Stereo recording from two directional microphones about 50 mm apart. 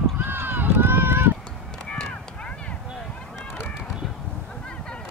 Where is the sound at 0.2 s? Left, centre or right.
Right.